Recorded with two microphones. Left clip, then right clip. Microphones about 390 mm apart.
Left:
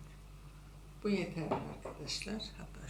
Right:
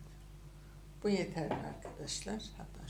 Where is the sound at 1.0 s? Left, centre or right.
Centre.